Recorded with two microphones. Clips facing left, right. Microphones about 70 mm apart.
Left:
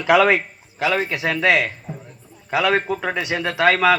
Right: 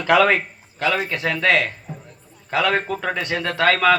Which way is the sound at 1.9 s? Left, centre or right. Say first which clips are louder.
Left 2 dB; centre.